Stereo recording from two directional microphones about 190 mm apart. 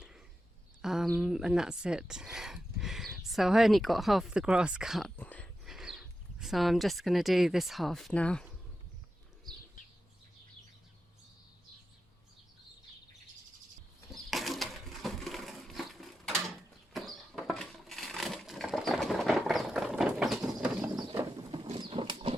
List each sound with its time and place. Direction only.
0.8 s speech: centre (ahead or behind)
14.1 s a sound: centre (ahead or behind)
21.2 s patter: 25° right (ahead or behind)